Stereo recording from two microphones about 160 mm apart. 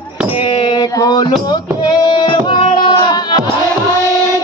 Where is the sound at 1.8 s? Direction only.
30° left (ahead or behind).